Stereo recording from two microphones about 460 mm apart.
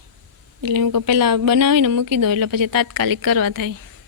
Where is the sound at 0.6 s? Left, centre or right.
Right.